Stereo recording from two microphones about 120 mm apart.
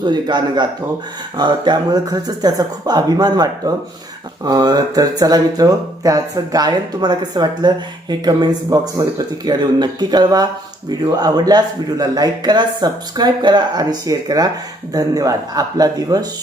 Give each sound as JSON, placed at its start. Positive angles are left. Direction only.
{"t": 0.0, "sound": "speech", "side_deg": -40}